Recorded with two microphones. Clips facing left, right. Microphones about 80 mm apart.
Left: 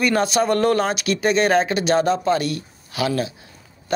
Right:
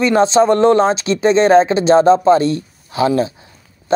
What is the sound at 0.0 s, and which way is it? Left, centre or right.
Speech, right.